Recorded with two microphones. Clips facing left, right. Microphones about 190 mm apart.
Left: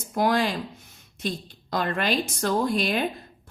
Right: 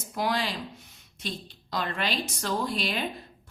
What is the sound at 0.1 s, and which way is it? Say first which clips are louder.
A woman's voice: left 6 dB; 50° left (ahead or behind).